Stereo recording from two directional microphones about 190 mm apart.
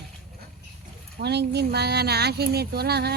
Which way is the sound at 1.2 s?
60° right (ahead or behind).